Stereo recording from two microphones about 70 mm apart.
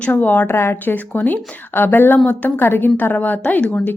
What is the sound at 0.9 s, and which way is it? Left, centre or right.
A woman's voice, left.